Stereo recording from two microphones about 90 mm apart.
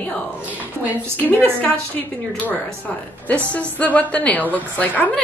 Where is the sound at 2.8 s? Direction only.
15° left (ahead or behind).